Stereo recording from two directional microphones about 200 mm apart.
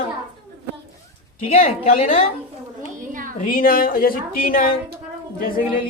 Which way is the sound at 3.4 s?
45° left (ahead or behind).